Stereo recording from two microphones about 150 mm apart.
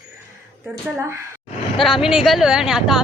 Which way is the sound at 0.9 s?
20° right (ahead or behind).